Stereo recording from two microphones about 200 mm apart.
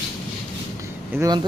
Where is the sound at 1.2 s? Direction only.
20° right (ahead or behind).